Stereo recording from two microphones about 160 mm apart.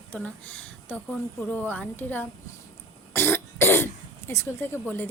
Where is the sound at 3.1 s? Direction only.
15° left (ahead or behind).